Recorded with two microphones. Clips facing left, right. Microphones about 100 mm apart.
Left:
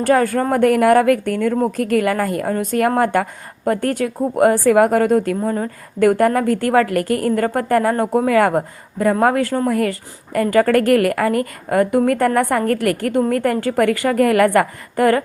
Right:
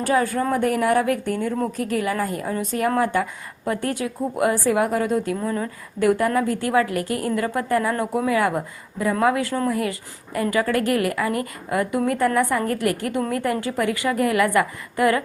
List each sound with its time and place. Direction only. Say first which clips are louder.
0.0 s a woman's voice: left 5 dB; 55° left (ahead or behind)
0.5 s a woman's voice: left 8 dB; 65° left (ahead or behind); by 9.6 s 40° left (ahead or behind)
9.6 s a woman's voice: left 5 dB; 55° left (ahead or behind)